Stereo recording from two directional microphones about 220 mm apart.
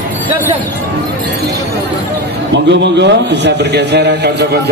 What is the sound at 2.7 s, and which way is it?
A man's voice, 50° right (ahead or behind).